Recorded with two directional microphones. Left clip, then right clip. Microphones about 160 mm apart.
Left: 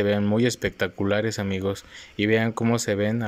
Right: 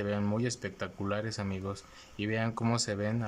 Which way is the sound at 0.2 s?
25° left (ahead or behind).